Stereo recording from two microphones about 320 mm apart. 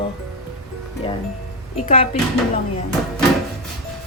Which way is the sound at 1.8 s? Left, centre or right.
Centre.